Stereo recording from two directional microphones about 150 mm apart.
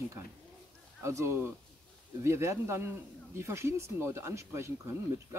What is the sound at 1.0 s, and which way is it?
Speech, 20° right (ahead or behind).